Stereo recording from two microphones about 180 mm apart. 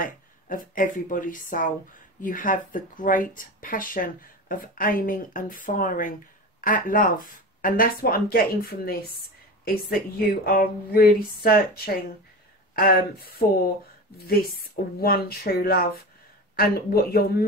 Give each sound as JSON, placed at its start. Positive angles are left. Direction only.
{"t": 0.0, "sound": "speech", "side_deg": 50}